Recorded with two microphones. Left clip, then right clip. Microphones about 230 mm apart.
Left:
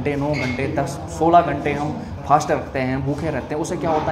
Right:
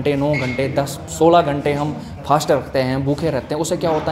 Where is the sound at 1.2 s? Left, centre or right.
Right.